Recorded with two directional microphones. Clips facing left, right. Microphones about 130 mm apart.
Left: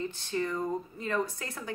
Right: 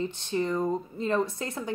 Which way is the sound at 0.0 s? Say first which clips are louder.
Right 3 dB; 20° right (ahead or behind).